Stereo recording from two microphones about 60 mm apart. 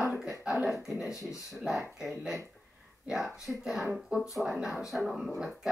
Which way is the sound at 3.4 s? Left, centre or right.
Centre.